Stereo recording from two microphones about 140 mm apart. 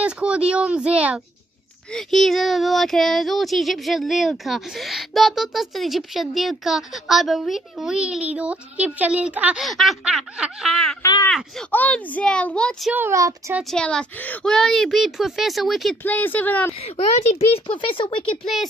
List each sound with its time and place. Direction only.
0.0 s speech: 10° right (ahead or behind)
2.0 s speech: centre (ahead or behind)
11.0 s speech: 25° left (ahead or behind)
11.7 s a woman's voice: 10° left (ahead or behind)
12.9 s speech: 20° right (ahead or behind)
13.7 s speech: 5° left (ahead or behind)
16.0 s a woman's voice: 10° left (ahead or behind)
17.5 s speech: 40° left (ahead or behind)
18.4 s speech: centre (ahead or behind)